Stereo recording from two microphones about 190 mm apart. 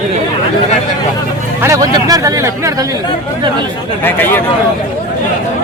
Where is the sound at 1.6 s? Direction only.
15° right (ahead or behind).